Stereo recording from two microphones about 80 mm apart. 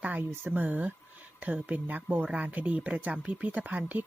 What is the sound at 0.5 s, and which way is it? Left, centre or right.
Speech, right.